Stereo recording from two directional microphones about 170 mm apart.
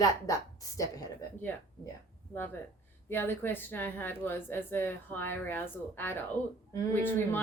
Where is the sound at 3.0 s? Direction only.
10° left (ahead or behind).